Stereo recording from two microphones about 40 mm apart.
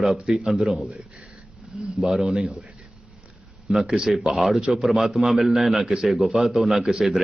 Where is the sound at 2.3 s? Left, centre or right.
Centre.